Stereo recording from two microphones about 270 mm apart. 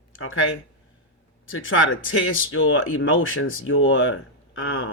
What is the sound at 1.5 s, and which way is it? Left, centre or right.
Speech, left.